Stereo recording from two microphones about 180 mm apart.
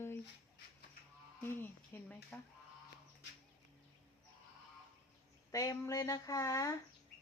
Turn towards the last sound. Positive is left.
turn(degrees=20)  # may be behind; listen again after turning